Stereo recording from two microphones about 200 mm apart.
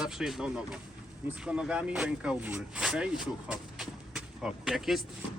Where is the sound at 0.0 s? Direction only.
5° right (ahead or behind).